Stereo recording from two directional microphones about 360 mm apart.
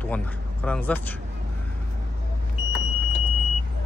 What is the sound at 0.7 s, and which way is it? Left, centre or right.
Speech, centre.